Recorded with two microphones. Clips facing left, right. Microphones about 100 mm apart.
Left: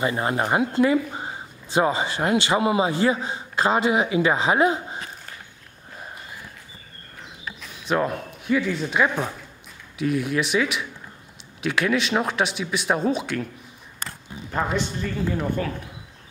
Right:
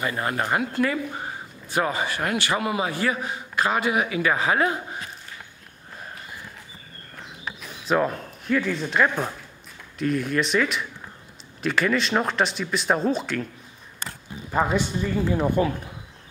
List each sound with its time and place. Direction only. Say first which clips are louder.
0.0 s speech: left 3 dB; 20° left (ahead or behind)
7.8 s speech: right 1 dB; centre (ahead or behind)
14.5 s speech: right 2 dB; 10° right (ahead or behind)